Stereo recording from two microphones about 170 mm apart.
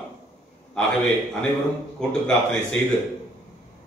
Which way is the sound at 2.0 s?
5° left (ahead or behind).